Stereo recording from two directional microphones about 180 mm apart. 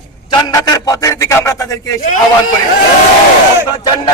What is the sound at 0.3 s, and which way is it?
A man's voice, 20° left (ahead or behind).